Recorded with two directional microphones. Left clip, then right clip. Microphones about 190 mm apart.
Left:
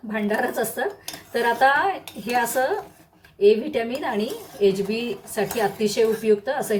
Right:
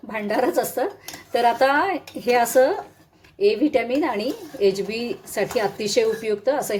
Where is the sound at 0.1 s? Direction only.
40° right (ahead or behind).